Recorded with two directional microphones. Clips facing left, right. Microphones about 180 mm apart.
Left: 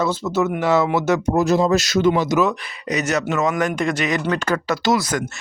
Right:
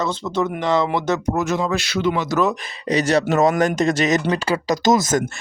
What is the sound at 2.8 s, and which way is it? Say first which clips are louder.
Speech: right 3 dB; 30° right (ahead or behind).